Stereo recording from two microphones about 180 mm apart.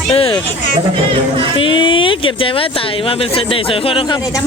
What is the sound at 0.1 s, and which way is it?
Music, 30° left (ahead or behind).